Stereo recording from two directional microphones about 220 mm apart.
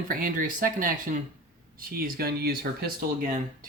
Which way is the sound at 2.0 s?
40° right (ahead or behind).